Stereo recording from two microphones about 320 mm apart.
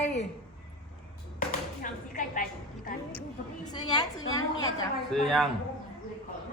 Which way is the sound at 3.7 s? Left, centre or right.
Centre.